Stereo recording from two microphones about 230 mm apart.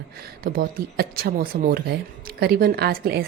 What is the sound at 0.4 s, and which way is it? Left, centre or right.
A woman's voice, right.